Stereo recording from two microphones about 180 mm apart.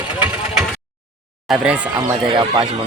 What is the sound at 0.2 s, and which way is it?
Vehicle, 10° right (ahead or behind).